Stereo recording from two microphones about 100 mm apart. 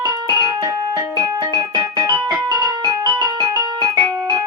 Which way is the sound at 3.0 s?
45° right (ahead or behind).